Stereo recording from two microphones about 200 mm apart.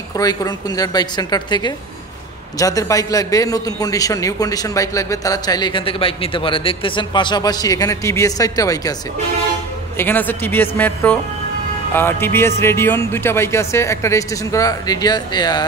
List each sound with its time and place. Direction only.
0.2 s a man's voice: 20° left (ahead or behind)
9.9 s a man's voice: 10° left (ahead or behind)